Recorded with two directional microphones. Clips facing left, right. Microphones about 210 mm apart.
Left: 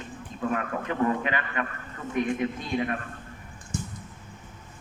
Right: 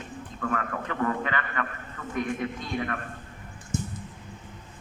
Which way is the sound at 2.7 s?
20° left (ahead or behind).